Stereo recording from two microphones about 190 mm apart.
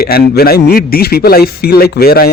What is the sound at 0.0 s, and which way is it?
A man's voice, 55° left (ahead or behind).